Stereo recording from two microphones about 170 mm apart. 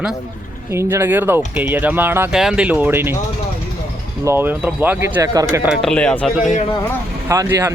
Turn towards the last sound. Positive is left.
turn(degrees=-20)  # may be behind; listen again after turning